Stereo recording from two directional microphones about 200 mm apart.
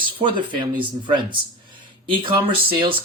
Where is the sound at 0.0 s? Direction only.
25° right (ahead or behind).